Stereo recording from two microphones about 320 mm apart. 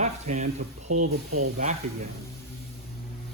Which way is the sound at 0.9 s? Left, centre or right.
Right.